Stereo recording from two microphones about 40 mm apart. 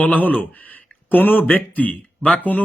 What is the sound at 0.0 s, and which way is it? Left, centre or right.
A man's voice, left.